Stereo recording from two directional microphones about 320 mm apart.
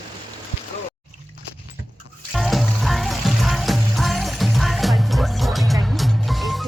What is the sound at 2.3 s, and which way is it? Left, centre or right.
Music, centre.